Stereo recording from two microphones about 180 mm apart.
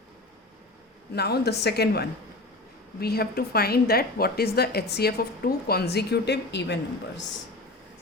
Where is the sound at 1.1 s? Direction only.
65° left (ahead or behind).